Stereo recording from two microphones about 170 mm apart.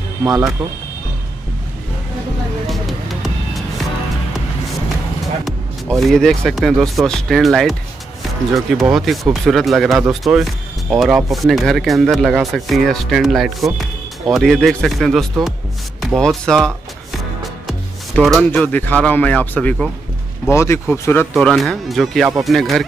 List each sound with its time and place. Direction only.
0.2 s speech: 20° right (ahead or behind)
2.6 s music: centre (ahead or behind)
5.4 s speech: centre (ahead or behind)